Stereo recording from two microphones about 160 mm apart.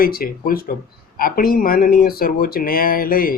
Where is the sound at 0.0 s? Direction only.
65° left (ahead or behind).